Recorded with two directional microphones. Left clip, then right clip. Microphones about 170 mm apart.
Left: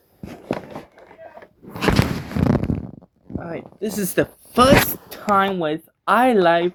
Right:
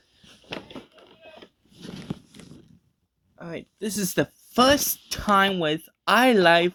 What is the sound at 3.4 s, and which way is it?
Speech, 10° right (ahead or behind).